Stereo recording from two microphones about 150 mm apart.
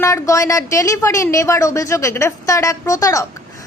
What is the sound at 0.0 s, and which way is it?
Speech, 20° left (ahead or behind).